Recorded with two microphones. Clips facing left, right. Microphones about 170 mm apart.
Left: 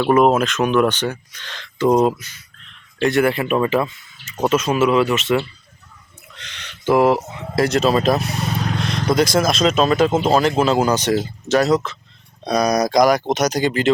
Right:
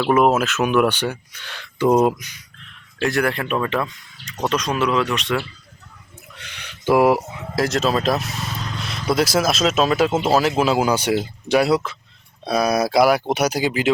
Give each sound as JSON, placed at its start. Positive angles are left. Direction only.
{"t": 0.0, "sound": "speech", "side_deg": 0}
{"t": 3.0, "sound": "speech", "side_deg": 0}
{"t": 6.3, "sound": "speech", "side_deg": -10}
{"t": 8.3, "sound": "vehicle", "side_deg": 65}
{"t": 9.0, "sound": "speech", "side_deg": -5}